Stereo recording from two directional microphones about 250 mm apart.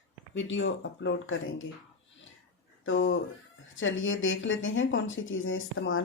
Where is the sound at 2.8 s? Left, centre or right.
Left.